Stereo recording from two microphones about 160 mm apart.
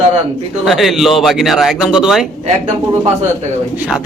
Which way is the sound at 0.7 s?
Centre (ahead or behind).